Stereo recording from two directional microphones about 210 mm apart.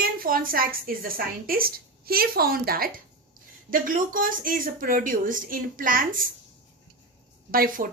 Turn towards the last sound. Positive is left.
turn(degrees=-40)  # may be behind; listen again after turning